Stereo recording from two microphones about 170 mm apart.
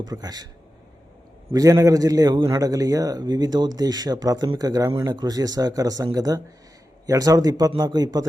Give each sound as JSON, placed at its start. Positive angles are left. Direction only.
{"t": 0.0, "sound": "a man's voice", "side_deg": -20}
{"t": 1.5, "sound": "a man's voice", "side_deg": -20}